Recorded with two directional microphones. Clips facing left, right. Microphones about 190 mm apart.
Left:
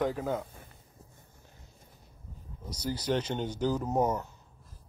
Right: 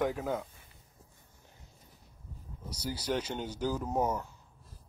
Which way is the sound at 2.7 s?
10° right (ahead or behind).